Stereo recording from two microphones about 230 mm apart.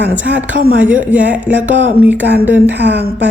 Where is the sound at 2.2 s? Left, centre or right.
Right.